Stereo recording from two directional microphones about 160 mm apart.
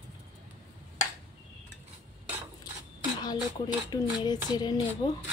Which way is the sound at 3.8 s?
25° left (ahead or behind).